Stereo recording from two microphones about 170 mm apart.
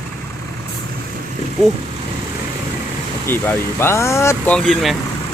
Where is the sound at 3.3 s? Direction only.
15° left (ahead or behind).